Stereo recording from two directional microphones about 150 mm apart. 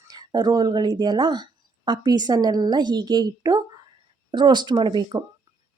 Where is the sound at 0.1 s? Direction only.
30° right (ahead or behind).